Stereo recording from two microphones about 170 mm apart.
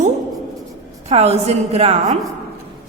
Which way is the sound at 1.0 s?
40° right (ahead or behind).